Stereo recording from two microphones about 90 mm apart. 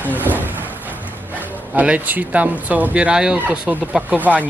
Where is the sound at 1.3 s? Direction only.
15° right (ahead or behind).